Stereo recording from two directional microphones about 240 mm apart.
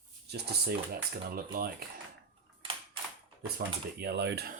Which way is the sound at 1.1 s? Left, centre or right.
Right.